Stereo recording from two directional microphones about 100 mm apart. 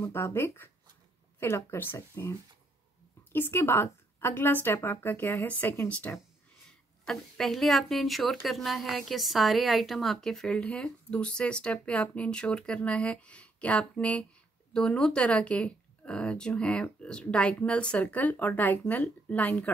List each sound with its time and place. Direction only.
0.0 s a woman's voice: 25° left (ahead or behind)
3.3 s a woman's voice: 25° left (ahead or behind)